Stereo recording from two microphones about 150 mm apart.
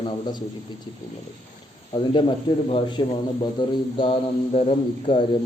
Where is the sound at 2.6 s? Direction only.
40° left (ahead or behind).